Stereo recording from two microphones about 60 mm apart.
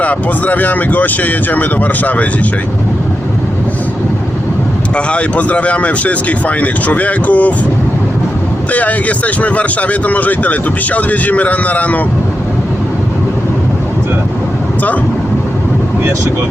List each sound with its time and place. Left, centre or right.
0.0 s speech: left
4.9 s speech: left
8.7 s speech: left